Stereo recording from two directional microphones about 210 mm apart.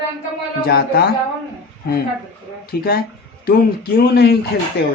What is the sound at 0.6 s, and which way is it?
Speech, 45° left (ahead or behind).